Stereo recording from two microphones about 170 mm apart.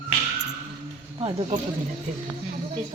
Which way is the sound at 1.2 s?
35° right (ahead or behind).